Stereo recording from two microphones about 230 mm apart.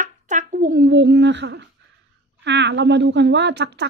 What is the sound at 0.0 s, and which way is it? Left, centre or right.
Speech, right.